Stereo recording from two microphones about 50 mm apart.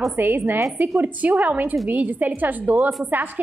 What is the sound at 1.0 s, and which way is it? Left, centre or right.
A woman's voice, right.